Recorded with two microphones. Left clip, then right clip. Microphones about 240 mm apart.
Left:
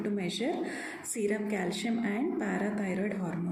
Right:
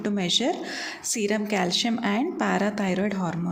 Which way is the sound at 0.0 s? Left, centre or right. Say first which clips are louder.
Right 9 dB; right.